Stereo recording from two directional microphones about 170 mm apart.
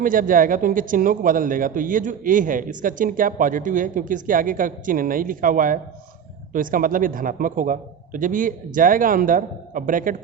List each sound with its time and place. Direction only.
0.0 s speech: 55° right (ahead or behind)